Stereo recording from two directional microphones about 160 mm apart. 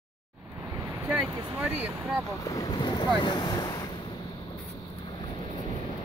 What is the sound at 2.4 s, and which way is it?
Speech, 20° left (ahead or behind).